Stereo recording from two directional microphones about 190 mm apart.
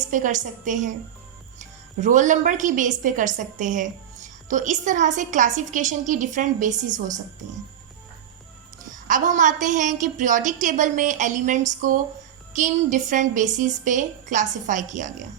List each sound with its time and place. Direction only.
0.1 s a woman's voice: 40° right (ahead or behind)
9.0 s a woman's voice: 45° right (ahead or behind)